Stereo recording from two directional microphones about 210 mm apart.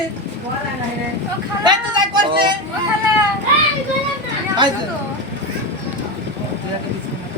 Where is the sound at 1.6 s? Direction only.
20° right (ahead or behind).